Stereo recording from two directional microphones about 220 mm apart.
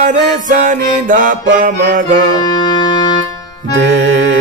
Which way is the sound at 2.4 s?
20° left (ahead or behind).